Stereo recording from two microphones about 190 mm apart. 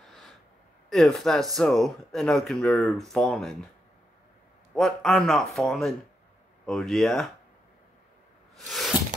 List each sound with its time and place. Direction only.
0.8 s speech: centre (ahead or behind)
4.7 s speech: centre (ahead or behind)
8.5 s a sound: centre (ahead or behind)